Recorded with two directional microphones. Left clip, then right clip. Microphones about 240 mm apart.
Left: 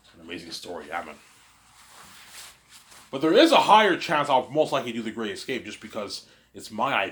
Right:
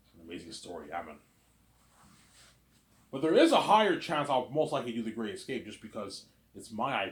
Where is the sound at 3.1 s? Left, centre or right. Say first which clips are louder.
Left 7 dB; left.